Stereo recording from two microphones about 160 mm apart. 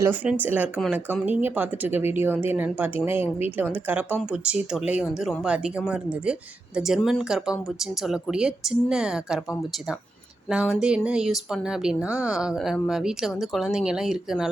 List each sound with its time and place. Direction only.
0.0 s speech: 10° right (ahead or behind)
10.5 s speech: 5° right (ahead or behind)